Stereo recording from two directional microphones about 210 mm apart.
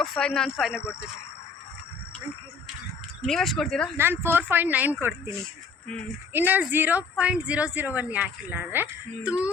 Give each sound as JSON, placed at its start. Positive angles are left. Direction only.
{"t": 0.0, "sound": "speech", "side_deg": 5}
{"t": 3.2, "sound": "speech", "side_deg": 0}
{"t": 3.9, "sound": "speech", "side_deg": -10}
{"t": 6.3, "sound": "speech", "side_deg": -10}